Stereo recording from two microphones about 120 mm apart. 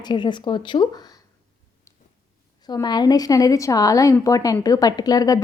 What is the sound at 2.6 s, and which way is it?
A woman's voice, 35° left (ahead or behind).